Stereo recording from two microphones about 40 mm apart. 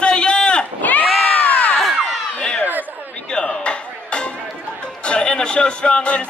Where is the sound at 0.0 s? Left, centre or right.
Left.